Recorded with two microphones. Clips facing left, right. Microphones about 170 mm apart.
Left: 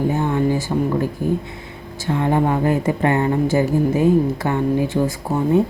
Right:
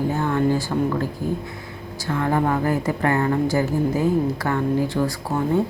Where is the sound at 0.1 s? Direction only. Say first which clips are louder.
Left 2 dB; 15° left (ahead or behind).